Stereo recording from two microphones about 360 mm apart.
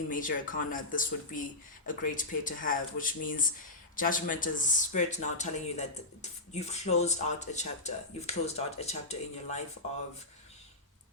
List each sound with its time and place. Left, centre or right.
0.1 s speech: left